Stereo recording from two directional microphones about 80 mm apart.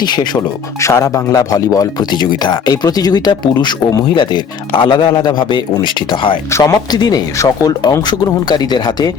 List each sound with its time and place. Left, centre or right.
0.0 s speech: left
0.8 s a man's voice: left
6.5 s speech: left
6.9 s speech: left
7.3 s speech: left
8.0 s speech: left